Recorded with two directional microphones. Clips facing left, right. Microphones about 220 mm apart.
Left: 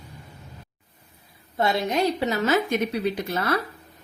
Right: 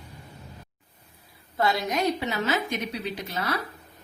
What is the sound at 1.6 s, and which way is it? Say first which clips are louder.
Speech: left 3 dB; 25° left (ahead or behind).